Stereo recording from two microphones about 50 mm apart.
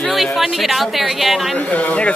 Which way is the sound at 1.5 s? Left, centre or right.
Left.